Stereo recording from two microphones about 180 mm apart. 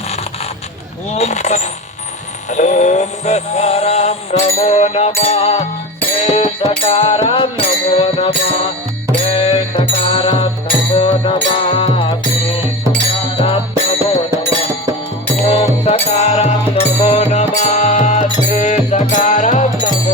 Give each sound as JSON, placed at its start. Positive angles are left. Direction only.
{"t": 1.1, "sound": "music", "side_deg": 35}
{"t": 2.5, "sound": "synthetic singing", "side_deg": 40}
{"t": 4.6, "sound": "music", "side_deg": 35}
{"t": 15.4, "sound": "music", "side_deg": 35}